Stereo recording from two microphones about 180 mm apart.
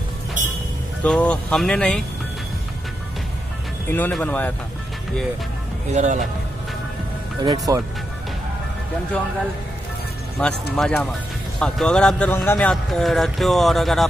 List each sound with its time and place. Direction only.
1.0 s speech: 5° left (ahead or behind)
3.9 s speech: 10° left (ahead or behind)
5.9 s a man's voice: 40° right (ahead or behind)
7.4 s speech: 20° right (ahead or behind)
10.4 s speech: 5° left (ahead or behind)